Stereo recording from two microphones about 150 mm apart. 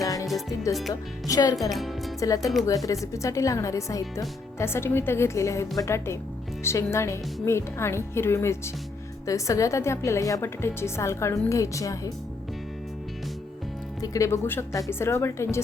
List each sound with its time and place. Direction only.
0.0 s music: 25° left (ahead or behind)
1.3 s a woman's voice: 25° left (ahead or behind)
1.7 s speech: centre (ahead or behind)
2.2 s a woman's voice: 25° left (ahead or behind)
14.0 s speech: 20° left (ahead or behind)